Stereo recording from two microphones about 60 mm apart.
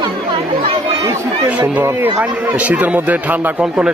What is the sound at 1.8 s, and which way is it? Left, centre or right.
Speech, right.